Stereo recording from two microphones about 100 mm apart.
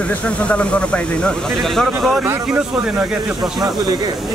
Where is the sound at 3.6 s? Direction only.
40° right (ahead or behind).